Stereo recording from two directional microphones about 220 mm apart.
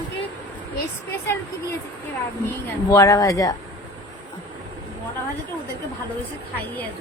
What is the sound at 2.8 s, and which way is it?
Speech, 15° left (ahead or behind).